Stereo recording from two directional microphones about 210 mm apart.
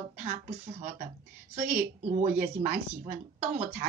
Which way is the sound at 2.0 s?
40° right (ahead or behind).